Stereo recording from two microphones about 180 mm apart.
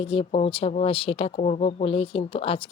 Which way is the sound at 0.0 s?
30° left (ahead or behind).